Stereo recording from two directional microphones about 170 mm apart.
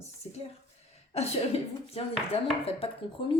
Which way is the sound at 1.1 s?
40° left (ahead or behind).